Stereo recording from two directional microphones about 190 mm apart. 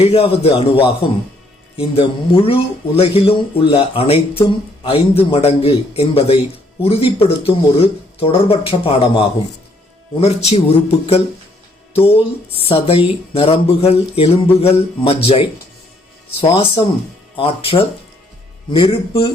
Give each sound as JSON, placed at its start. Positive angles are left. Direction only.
{"t": 0.0, "sound": "speech", "side_deg": 30}